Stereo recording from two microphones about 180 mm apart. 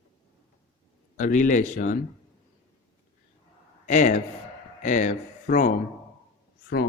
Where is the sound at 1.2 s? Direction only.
45° left (ahead or behind).